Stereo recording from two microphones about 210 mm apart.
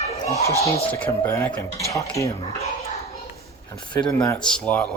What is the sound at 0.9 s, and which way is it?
Speech, 10° left (ahead or behind).